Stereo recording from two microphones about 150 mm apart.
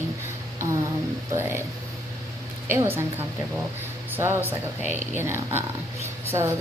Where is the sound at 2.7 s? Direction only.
15° right (ahead or behind).